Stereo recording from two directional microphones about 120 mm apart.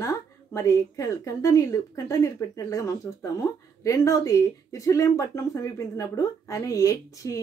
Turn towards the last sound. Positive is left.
turn(degrees=25)  # may be behind; listen again after turning